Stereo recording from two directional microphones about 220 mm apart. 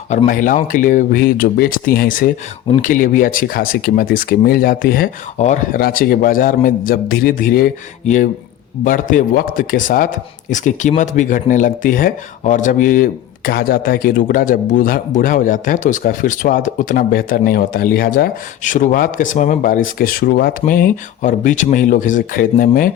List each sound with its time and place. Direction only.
0.1 s speech: 35° left (ahead or behind)